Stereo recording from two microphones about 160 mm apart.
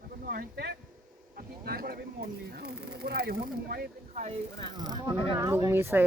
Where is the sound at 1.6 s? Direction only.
75° right (ahead or behind).